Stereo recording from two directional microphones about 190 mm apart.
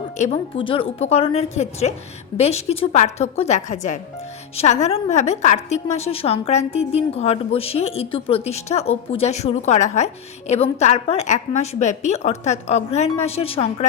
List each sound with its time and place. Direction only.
0.2 s a woman's voice: 35° left (ahead or behind)